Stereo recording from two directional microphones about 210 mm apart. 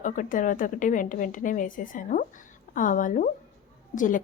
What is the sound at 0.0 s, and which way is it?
A woman's voice, 40° left (ahead or behind).